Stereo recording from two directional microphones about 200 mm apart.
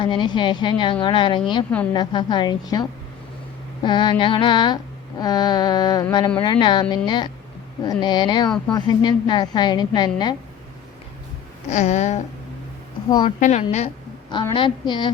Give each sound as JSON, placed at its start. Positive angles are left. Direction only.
{"t": 0.0, "sound": "a woman's voice", "side_deg": 25}
{"t": 3.8, "sound": "a woman's voice", "side_deg": 25}
{"t": 11.7, "sound": "a woman's voice", "side_deg": 35}
{"t": 13.1, "sound": "a woman's voice", "side_deg": 20}
{"t": 13.4, "sound": "a woman's voice", "side_deg": 35}
{"t": 14.3, "sound": "a woman's voice", "side_deg": 20}